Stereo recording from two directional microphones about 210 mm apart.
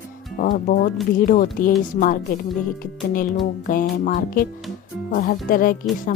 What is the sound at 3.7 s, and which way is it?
Speech, 40° left (ahead or behind).